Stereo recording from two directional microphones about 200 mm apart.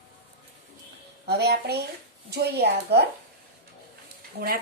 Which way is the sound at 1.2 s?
55° right (ahead or behind).